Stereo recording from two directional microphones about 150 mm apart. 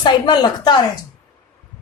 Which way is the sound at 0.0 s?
30° left (ahead or behind).